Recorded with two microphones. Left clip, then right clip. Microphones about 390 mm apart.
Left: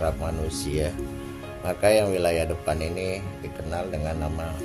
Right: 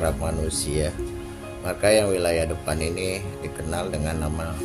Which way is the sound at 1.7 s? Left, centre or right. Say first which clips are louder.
Right 1 dB; left.